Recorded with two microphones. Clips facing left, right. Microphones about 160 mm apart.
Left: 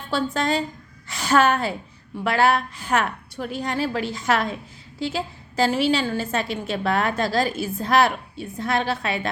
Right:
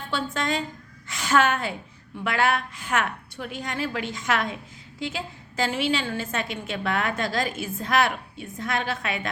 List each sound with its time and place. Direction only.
0.1 s a woman's voice: 35° left (ahead or behind)
1.0 s a sound: 35° left (ahead or behind)
2.2 s a woman's voice: 35° left (ahead or behind)